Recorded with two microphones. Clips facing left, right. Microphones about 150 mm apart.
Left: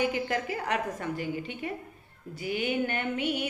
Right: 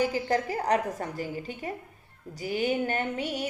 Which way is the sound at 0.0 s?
35° right (ahead or behind).